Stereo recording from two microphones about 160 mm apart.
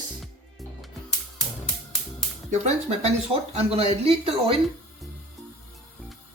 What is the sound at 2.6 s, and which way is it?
Speech, 40° right (ahead or behind).